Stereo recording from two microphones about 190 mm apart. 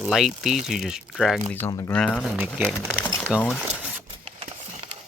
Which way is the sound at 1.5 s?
15° left (ahead or behind).